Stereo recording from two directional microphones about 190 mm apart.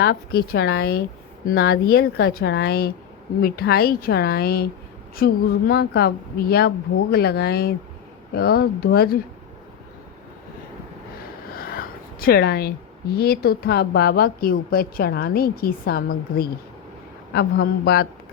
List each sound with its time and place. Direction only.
0.0 s speech: 60° left (ahead or behind)
11.5 s speech: 50° left (ahead or behind)